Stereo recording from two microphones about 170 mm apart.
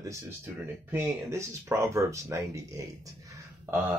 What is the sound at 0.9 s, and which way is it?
Speech, 15° right (ahead or behind).